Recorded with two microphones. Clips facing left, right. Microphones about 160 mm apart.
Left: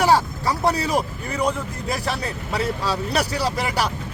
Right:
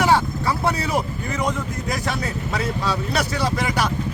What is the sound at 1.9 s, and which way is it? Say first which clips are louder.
Speech: left 1 dB; 30° left (ahead or behind).